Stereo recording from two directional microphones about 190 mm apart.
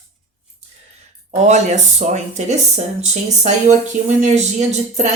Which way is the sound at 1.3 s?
40° right (ahead or behind).